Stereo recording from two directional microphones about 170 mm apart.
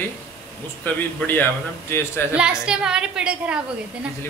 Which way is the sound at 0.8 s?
10° left (ahead or behind).